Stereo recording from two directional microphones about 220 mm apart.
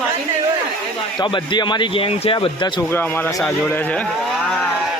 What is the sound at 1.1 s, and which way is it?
A man's voice, 20° left (ahead or behind).